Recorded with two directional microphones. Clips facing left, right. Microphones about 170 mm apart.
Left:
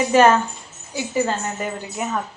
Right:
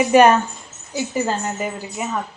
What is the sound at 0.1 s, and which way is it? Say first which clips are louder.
Speech: right 2 dB; 15° right (ahead or behind).